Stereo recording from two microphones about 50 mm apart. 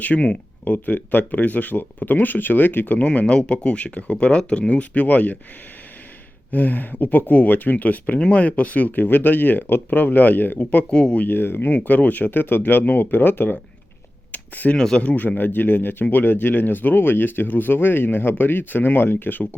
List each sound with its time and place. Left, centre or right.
0.0 s speech: left
3.1 s speech: left
6.5 s speech: left
10.9 s speech: centre
11.2 s speech: left
11.7 s speech: left
14.8 s speech: centre
15.0 s speech: left